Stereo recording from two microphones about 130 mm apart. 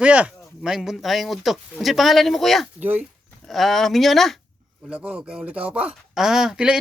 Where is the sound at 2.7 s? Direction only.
15° right (ahead or behind).